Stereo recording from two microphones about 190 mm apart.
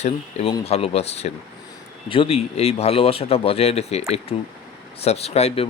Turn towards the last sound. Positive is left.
turn(degrees=30)  # may be behind; listen again after turning